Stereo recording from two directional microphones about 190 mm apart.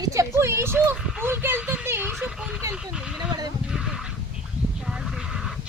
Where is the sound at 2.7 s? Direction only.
5° right (ahead or behind).